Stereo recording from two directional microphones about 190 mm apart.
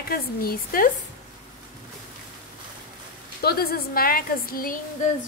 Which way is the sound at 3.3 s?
55° left (ahead or behind).